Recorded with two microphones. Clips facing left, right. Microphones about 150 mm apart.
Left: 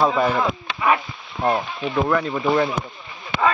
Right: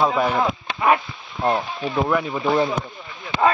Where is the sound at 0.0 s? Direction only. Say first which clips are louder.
Left 1 dB; 5° right (ahead or behind).